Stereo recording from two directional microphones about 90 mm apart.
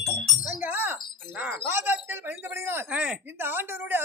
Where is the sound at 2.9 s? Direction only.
15° right (ahead or behind).